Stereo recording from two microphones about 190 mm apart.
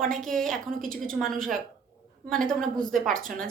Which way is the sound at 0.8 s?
45° right (ahead or behind).